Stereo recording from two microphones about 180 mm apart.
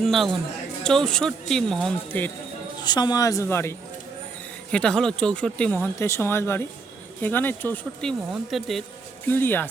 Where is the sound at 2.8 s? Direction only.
25° left (ahead or behind).